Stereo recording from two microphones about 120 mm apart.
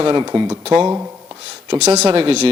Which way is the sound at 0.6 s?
50° right (ahead or behind).